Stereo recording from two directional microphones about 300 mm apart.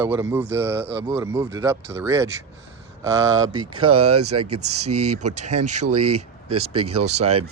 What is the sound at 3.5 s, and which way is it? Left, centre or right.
Speech, centre.